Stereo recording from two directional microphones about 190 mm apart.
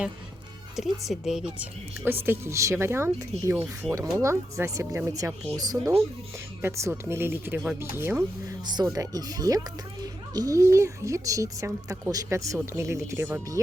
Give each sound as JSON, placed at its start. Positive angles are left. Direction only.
{"t": 0.8, "sound": "a woman's voice", "side_deg": 0}
{"t": 3.8, "sound": "a woman's voice", "side_deg": 5}
{"t": 4.2, "sound": "speech", "side_deg": -15}